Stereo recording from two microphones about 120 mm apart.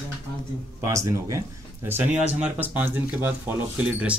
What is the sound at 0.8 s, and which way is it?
Speech, 25° right (ahead or behind).